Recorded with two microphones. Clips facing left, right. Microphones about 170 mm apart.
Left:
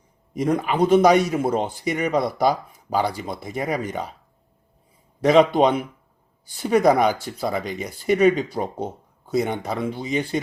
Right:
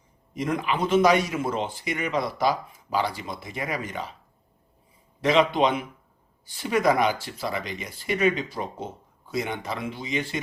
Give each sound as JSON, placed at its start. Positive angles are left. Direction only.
{"t": 0.3, "sound": "speech", "side_deg": 40}
{"t": 5.2, "sound": "speech", "side_deg": 40}